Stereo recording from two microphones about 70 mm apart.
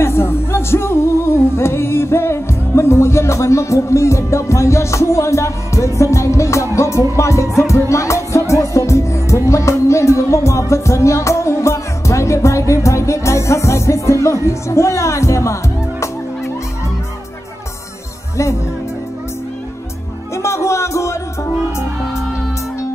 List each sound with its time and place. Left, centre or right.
0.0 s music: left
20.4 s music: left